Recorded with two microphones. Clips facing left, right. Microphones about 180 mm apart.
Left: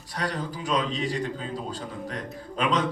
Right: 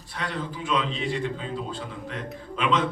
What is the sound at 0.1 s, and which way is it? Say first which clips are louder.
A man's voice: left 1 dB; 40° left (ahead or behind).